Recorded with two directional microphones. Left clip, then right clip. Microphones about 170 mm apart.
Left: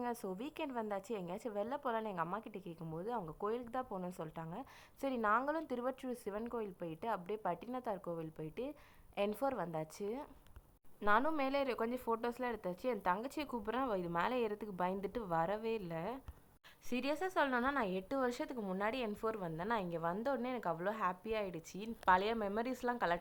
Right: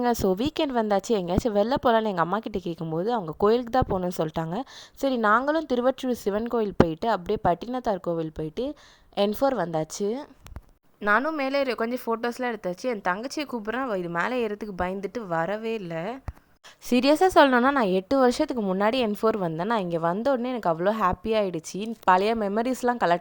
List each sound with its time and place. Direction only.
0.0 s a woman's voice: 60° right (ahead or behind)
2.8 s a woman's voice: 55° right (ahead or behind); by 4.6 s 75° right (ahead or behind)
4.9 s a woman's voice: 55° right (ahead or behind)
11.3 s speech: 45° right (ahead or behind)
16.9 s a woman's voice: 60° right (ahead or behind)